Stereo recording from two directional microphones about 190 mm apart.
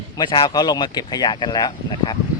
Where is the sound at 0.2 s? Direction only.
25° left (ahead or behind).